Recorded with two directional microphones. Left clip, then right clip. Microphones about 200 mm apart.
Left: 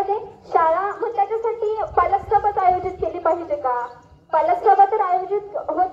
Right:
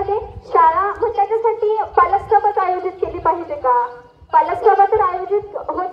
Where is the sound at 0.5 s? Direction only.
50° left (ahead or behind).